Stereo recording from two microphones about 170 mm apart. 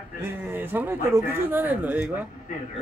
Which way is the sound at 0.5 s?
10° right (ahead or behind).